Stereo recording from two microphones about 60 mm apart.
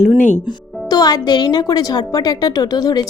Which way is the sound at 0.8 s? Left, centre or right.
Left.